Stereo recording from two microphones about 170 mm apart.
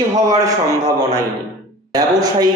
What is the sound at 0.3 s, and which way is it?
Speech, 20° right (ahead or behind).